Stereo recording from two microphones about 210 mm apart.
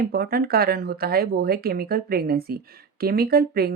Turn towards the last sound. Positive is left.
turn(degrees=-45)  # may be behind; listen again after turning